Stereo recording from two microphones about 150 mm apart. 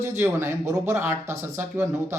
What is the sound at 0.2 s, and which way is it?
Speech, 15° right (ahead or behind).